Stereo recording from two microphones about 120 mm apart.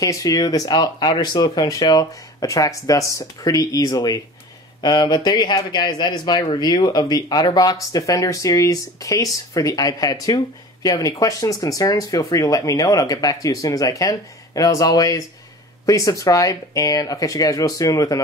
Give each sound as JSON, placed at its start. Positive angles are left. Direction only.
{"t": 0.0, "sound": "speech", "side_deg": 30}